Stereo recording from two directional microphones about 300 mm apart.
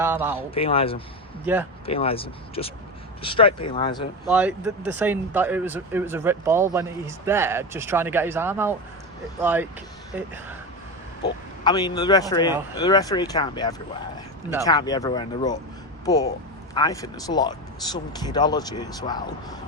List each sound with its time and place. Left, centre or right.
0.0 s speech: centre
0.3 s speech: centre
4.3 s speech: centre
11.6 s speech: centre
16.7 s speech: centre